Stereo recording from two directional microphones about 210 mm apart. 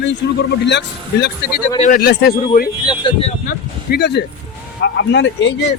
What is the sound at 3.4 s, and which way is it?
A man's voice, 50° left (ahead or behind).